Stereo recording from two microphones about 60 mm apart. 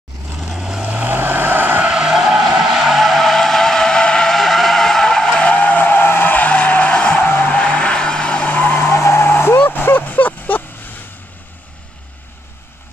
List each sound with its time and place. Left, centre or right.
0.4 s vehicle: centre
0.8 s vehicle: right
1.9 s vehicle: centre
2.7 s vehicle: centre
7.2 s vehicle: left
8.9 s vehicle: left